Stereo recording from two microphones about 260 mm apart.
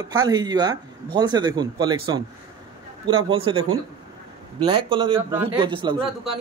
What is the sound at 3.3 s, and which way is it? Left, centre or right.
A man's voice, right.